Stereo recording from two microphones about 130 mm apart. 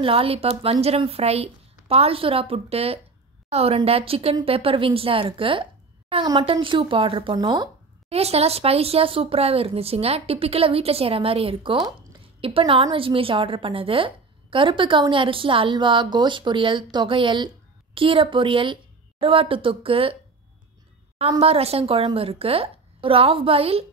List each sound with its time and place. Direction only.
0.0 s a woman's voice: 45° right (ahead or behind)
7.3 s speech: 30° right (ahead or behind)
8.1 s a woman's voice: 50° right (ahead or behind)
21.4 s speech: 50° right (ahead or behind)